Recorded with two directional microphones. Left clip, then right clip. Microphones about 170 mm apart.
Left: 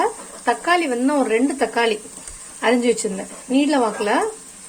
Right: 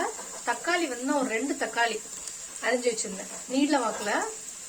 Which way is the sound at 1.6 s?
50° left (ahead or behind).